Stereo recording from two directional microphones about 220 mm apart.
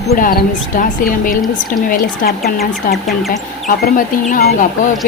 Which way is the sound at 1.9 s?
45° left (ahead or behind).